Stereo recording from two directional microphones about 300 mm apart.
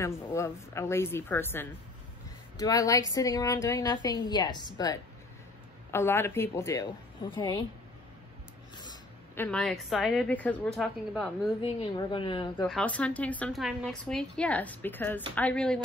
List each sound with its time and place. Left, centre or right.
0.0 s a woman's voice: centre
8.7 s a woman's voice: centre
11.6 s a woman's voice: centre
12.6 s a woman's voice: centre